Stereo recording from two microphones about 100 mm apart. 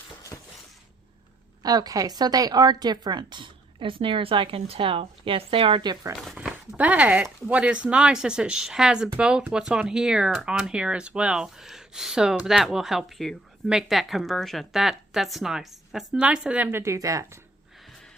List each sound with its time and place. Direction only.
1.6 s a woman's voice: 40° right (ahead or behind); by 5.8 s 60° right (ahead or behind)
5.8 s speech: 45° right (ahead or behind)
6.3 s speech: 10° right (ahead or behind)
16.7 s speech: 30° right (ahead or behind)